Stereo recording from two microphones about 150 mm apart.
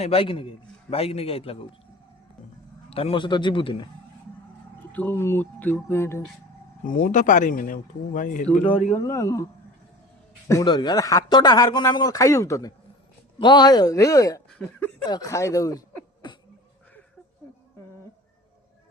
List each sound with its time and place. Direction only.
0.0 s a man's voice: 40° left (ahead or behind)
2.9 s a man's voice: 40° left (ahead or behind)
4.9 s speech: 10° left (ahead or behind)
6.8 s speech: 65° left (ahead or behind)
8.9 s a man's voice: 20° left (ahead or behind)
10.5 s a man's voice: 25° left (ahead or behind)
15.0 s a man's voice: 25° left (ahead or behind)
16.2 s a sound: 35° left (ahead or behind)